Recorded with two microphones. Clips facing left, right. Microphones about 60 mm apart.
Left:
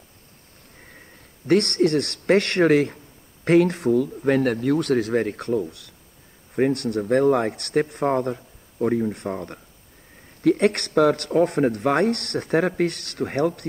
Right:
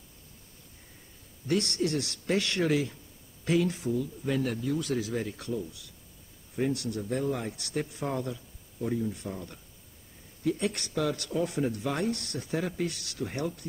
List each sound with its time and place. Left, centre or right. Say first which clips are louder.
1.5 s a man's voice: left 10 dB; left